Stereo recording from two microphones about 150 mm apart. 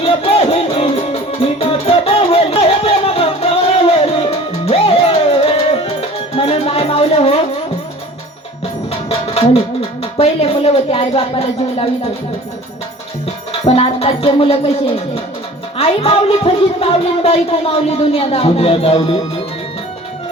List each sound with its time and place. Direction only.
0.0 s music: 40° left (ahead or behind)
8.9 s music: 40° left (ahead or behind)
10.0 s a woman's voice: 40° left (ahead or behind)
13.5 s a woman's voice: 40° left (ahead or behind)